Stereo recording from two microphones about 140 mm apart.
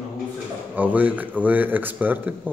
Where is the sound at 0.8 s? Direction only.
10° right (ahead or behind).